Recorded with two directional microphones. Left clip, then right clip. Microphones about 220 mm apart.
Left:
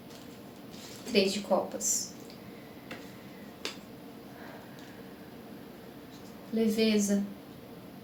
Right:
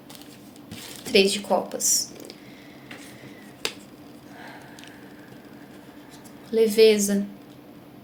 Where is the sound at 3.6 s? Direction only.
45° right (ahead or behind).